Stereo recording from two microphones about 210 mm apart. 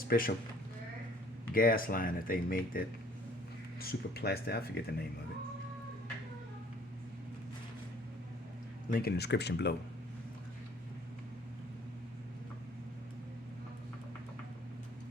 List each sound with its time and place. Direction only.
0.1 s speech: 45° left (ahead or behind)
1.5 s speech: 40° left (ahead or behind)
8.9 s speech: 45° left (ahead or behind)